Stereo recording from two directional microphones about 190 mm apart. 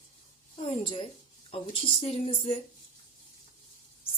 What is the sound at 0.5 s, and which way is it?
Speech, 30° left (ahead or behind).